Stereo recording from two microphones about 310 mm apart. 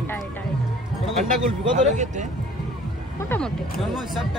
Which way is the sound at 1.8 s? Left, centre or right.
Right.